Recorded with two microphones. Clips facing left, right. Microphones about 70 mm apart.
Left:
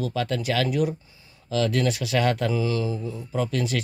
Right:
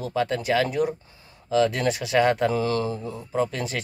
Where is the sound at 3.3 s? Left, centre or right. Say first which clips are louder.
Even; right.